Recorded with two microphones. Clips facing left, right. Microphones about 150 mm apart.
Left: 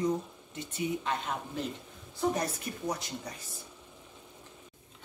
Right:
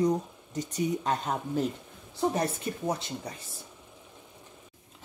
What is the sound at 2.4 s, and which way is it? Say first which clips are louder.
Speech: right 4 dB; 25° right (ahead or behind).